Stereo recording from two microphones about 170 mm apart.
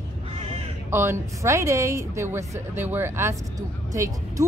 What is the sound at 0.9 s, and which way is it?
A woman's voice, 15° right (ahead or behind).